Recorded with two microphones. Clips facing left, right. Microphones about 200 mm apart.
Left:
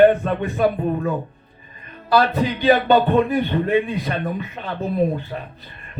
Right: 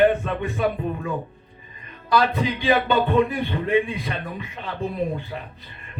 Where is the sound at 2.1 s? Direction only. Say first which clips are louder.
Left 3 dB; 40° left (ahead or behind).